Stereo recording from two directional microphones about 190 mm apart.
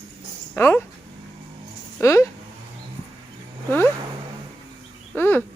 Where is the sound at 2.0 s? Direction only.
15° left (ahead or behind).